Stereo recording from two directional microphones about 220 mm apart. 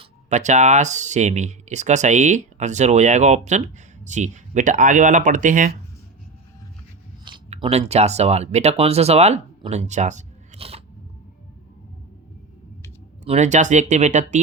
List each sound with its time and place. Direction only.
0.0 s speech: 30° right (ahead or behind)
7.3 s speech: 25° right (ahead or behind)
13.2 s speech: 30° right (ahead or behind)